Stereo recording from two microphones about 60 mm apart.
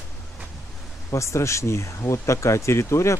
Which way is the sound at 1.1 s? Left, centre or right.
Left.